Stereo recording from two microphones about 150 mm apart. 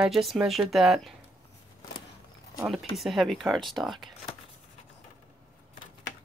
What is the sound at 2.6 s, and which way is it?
Speech, centre (ahead or behind).